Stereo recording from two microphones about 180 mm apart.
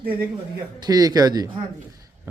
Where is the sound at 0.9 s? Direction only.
20° right (ahead or behind).